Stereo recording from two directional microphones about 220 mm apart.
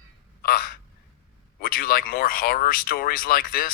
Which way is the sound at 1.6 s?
40° left (ahead or behind).